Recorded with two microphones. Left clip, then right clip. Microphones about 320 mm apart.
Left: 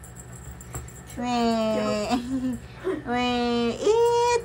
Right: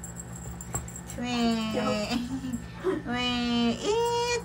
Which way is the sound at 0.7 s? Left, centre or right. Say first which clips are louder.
Left 2 dB; centre.